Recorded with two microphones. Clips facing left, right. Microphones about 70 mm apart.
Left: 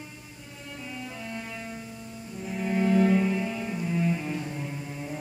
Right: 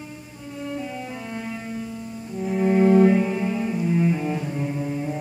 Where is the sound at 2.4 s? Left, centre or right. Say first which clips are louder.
Right 8 dB; right.